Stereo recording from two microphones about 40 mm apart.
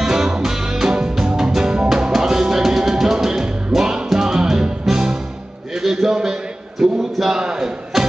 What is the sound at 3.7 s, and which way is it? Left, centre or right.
Music, centre.